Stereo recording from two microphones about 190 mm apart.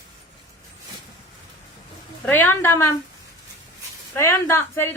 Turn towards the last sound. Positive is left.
turn(degrees=10)  # may be behind; listen again after turning